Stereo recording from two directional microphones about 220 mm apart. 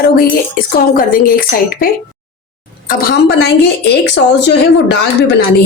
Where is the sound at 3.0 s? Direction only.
45° left (ahead or behind).